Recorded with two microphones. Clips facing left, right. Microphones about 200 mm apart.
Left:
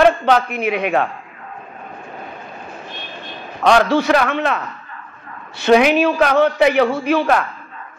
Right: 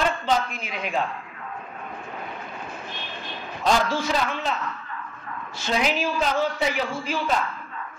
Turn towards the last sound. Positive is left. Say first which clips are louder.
# left 9 dB
turn(degrees=65)  # may be behind; listen again after turning